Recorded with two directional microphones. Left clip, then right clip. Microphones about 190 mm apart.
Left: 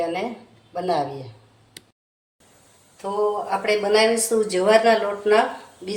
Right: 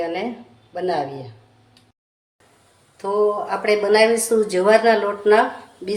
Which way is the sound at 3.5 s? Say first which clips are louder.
Right 2 dB; 30° right (ahead or behind).